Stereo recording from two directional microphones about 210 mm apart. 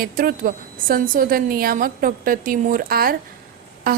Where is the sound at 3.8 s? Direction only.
45° right (ahead or behind).